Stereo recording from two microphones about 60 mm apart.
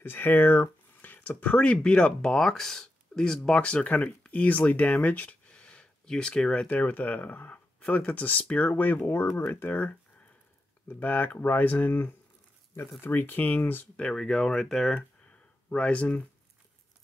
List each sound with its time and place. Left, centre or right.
0.0 s a sound: left
1.5 s speech: left
6.7 s speech: left
10.9 s speech: left
13.9 s speech: centre
15.7 s speech: left